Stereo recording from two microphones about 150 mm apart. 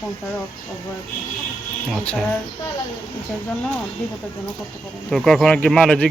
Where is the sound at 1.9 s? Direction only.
5° left (ahead or behind).